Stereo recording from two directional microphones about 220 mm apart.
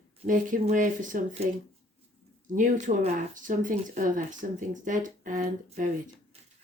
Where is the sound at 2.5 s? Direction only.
35° right (ahead or behind).